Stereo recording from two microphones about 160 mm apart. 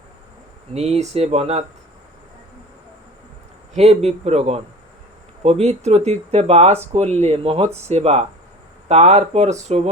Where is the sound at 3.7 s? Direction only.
40° right (ahead or behind).